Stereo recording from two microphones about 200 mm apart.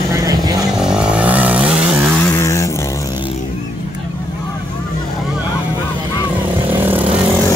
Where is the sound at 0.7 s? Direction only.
5° right (ahead or behind).